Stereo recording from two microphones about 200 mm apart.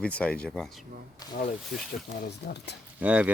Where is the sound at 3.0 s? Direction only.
5° right (ahead or behind).